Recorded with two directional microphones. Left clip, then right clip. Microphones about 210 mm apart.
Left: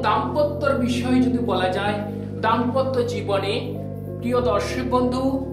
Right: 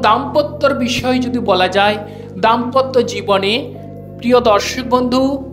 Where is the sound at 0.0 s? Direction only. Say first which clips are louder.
Right 7 dB; 40° right (ahead or behind).